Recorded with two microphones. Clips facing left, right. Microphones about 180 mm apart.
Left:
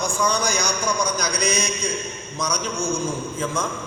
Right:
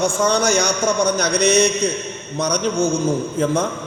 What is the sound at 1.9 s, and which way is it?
Speech, 10° left (ahead or behind).